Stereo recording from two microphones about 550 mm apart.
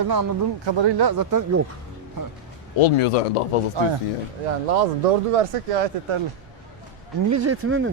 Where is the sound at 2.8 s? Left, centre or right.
Left.